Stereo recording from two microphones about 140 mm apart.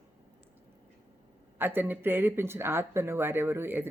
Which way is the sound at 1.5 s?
15° right (ahead or behind).